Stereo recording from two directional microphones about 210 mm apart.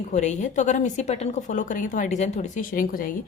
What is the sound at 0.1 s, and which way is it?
A woman's voice, 35° left (ahead or behind).